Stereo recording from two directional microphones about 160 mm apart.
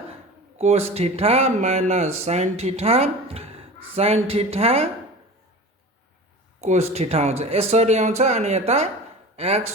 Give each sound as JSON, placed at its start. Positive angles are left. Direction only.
{"t": 0.6, "sound": "speech", "side_deg": -40}
{"t": 6.6, "sound": "speech", "side_deg": -45}